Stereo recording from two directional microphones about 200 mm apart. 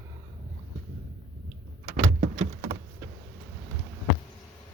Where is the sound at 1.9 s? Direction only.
35° right (ahead or behind).